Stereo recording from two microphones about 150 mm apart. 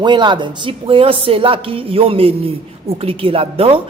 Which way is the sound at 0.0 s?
30° right (ahead or behind).